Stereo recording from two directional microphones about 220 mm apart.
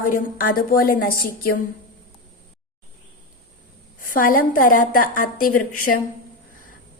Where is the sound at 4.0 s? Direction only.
40° left (ahead or behind).